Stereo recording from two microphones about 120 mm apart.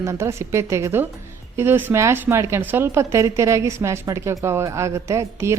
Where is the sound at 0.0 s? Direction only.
25° right (ahead or behind).